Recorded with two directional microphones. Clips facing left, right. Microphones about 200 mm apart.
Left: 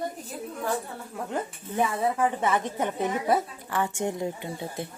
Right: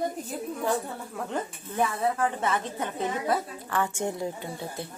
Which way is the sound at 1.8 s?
15° left (ahead or behind).